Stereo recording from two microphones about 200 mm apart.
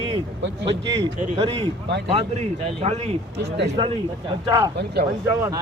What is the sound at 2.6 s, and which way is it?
Speech, 30° right (ahead or behind).